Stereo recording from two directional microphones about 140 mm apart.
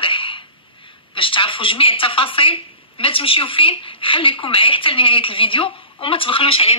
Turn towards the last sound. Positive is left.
turn(degrees=40)  # may be behind; listen again after turning